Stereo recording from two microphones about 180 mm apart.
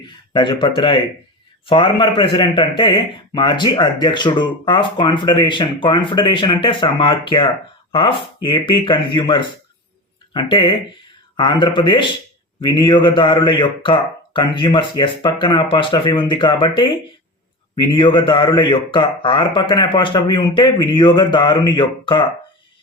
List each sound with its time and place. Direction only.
0.3 s a man's voice: 25° left (ahead or behind)